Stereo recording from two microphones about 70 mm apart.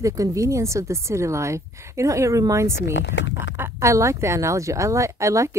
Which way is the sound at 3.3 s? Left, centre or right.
Right.